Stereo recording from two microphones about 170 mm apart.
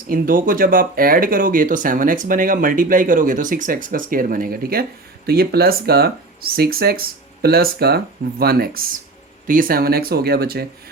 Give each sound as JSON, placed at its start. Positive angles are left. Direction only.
{"t": 0.1, "sound": "speech", "side_deg": -55}